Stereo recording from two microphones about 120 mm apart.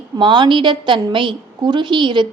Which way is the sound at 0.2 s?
40° right (ahead or behind).